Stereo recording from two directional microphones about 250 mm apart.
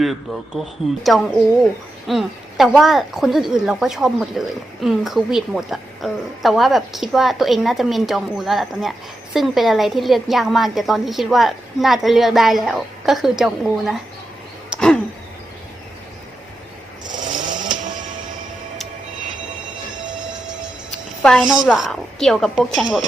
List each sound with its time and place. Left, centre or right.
0.0 s a woman's voice: centre
14.7 s a sound: centre
17.4 s chainsaw: right
21.2 s a woman's voice: centre